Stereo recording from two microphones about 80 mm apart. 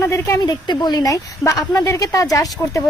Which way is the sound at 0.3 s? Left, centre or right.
Left.